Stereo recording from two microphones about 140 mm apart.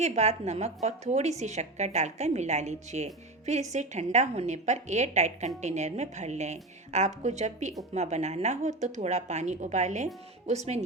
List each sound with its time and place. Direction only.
0.0 s a woman's voice: 55° right (ahead or behind)